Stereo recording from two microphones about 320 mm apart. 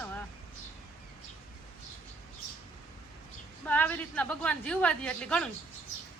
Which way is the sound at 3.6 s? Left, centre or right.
Centre.